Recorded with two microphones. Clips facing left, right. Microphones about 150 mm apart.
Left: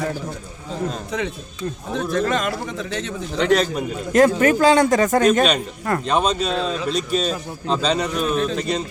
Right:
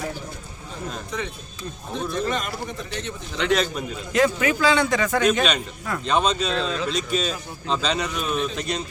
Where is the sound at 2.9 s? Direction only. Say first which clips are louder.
Left 8 dB; 40° left (ahead or behind).